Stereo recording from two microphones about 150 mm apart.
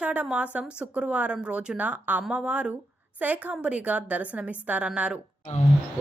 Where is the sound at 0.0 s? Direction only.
10° right (ahead or behind).